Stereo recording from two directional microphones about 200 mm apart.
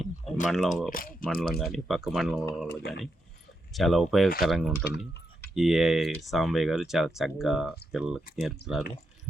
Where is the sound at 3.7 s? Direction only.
Centre (ahead or behind).